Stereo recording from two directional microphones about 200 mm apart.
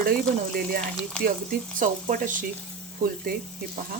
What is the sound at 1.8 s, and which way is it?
Speech, 40° right (ahead or behind).